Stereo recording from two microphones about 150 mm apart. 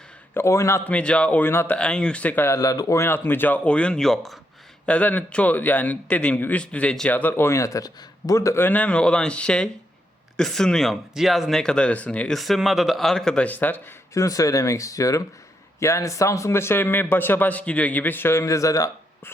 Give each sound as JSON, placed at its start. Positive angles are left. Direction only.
{"t": 0.3, "sound": "a man's voice", "side_deg": 20}
{"t": 0.9, "sound": "a man's voice", "side_deg": 10}